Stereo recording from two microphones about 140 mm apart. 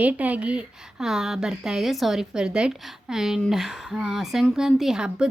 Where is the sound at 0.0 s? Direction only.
10° right (ahead or behind).